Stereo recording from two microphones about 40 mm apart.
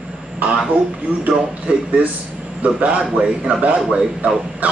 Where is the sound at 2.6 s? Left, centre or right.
Right.